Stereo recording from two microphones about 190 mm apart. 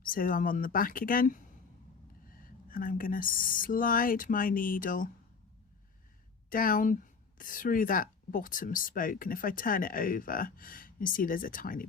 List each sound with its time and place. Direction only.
0.0 s speech: 45° left (ahead or behind)
6.5 s speech: 45° left (ahead or behind)